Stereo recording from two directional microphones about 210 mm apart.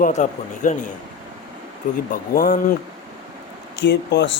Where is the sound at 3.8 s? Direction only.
55° left (ahead or behind).